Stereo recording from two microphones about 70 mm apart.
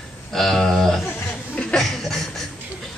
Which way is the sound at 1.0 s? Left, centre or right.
Centre.